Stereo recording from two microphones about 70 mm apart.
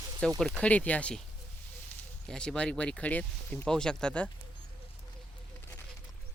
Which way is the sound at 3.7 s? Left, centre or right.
Centre.